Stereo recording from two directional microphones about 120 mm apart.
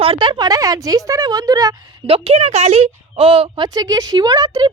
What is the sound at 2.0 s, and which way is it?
A woman's voice, 50° right (ahead or behind).